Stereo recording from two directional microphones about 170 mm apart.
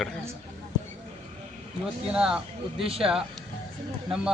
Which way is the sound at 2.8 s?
35° right (ahead or behind).